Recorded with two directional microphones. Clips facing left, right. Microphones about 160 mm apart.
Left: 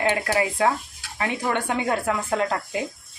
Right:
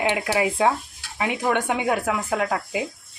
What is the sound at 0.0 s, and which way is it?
Speech, 15° right (ahead or behind).